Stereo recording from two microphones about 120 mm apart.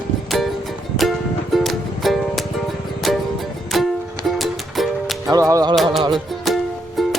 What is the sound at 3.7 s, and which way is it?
Music, centre (ahead or behind).